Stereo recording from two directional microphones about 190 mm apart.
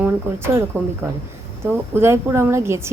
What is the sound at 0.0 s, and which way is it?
Speech, 10° right (ahead or behind).